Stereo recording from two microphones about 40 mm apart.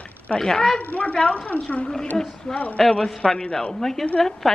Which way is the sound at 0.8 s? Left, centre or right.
Left.